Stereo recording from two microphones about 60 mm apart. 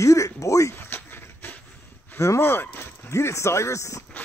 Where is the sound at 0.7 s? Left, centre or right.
Left.